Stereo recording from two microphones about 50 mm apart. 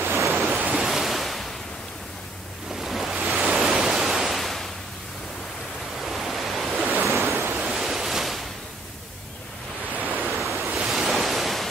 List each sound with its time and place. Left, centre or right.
0.0 s waves: right
0.3 s waves: centre
2.7 s waves: centre
3.4 s pink noise: centre
6.0 s waves: centre
10.1 s waves: centre